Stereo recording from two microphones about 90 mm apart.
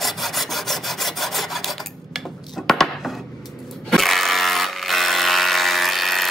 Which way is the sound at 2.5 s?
5° left (ahead or behind).